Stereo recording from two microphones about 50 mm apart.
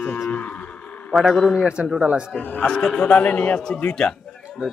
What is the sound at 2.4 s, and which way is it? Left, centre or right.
Speech, left.